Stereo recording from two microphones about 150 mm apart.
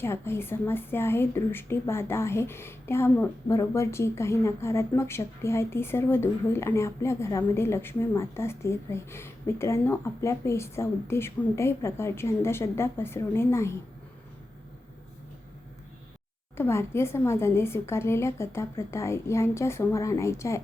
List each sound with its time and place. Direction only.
0.0 s a woman's voice: 15° left (ahead or behind)
16.6 s a woman's voice: 15° left (ahead or behind)